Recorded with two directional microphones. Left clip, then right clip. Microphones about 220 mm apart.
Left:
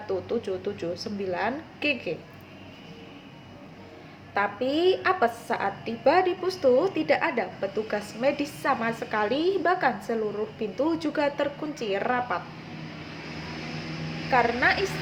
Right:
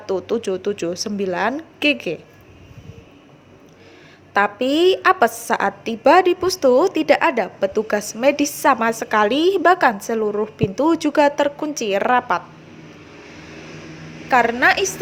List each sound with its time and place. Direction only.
0.1 s a woman's voice: 50° right (ahead or behind)
4.4 s a woman's voice: 50° right (ahead or behind)
14.3 s a woman's voice: 50° right (ahead or behind)